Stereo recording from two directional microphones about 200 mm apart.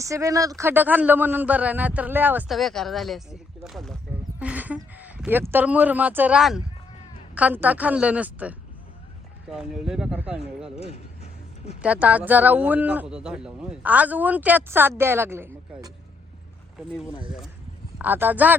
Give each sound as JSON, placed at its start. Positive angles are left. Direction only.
{"t": 0.0, "sound": "a man's voice", "side_deg": -15}
{"t": 10.8, "sound": "a sound", "side_deg": 30}
{"t": 11.8, "sound": "a man's voice", "side_deg": -5}
{"t": 16.7, "sound": "speech", "side_deg": 0}